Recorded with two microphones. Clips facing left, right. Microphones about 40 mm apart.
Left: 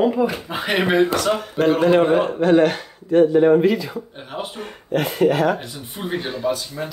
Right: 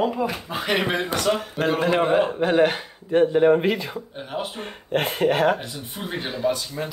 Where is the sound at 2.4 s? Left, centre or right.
Centre.